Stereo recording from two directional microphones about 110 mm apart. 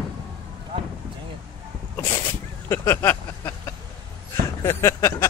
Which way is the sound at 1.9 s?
20° left (ahead or behind).